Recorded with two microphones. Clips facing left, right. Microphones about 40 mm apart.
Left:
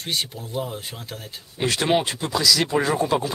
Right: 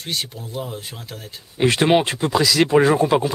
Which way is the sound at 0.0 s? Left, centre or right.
Centre.